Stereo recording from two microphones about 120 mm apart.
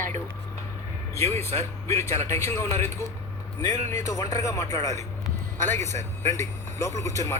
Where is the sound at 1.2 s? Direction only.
20° left (ahead or behind).